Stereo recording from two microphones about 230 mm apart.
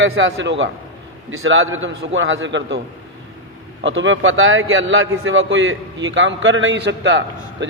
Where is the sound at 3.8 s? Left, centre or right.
Right.